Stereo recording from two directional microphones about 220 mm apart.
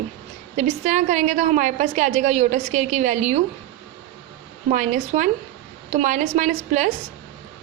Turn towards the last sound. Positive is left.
turn(degrees=-35)  # may be behind; listen again after turning